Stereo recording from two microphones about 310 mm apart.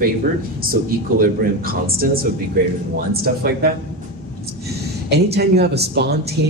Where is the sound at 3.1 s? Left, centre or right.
Right.